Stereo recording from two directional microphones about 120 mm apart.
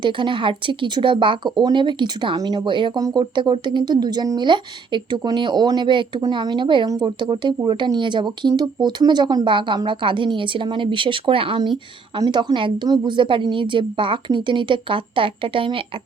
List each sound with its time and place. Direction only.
0.0 s speech: 40° right (ahead or behind)
12.1 s a woman's voice: 40° right (ahead or behind)